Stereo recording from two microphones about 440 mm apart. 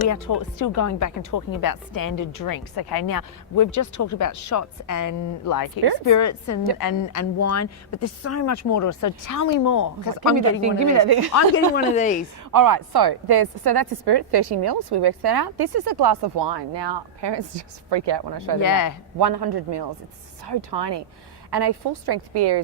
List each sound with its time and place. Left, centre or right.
0.1 s speech: left
6.1 s speech: left
10.6 s a woman's voice: right
11.7 s speech: centre
12.5 s a woman's voice: right
18.6 s speech: left
19.2 s a woman's voice: right